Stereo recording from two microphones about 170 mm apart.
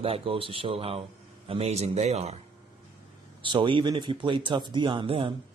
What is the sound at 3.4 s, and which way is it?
Speech, 30° right (ahead or behind).